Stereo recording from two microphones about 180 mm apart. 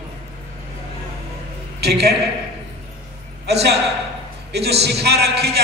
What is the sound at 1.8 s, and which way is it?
Speech, 65° right (ahead or behind).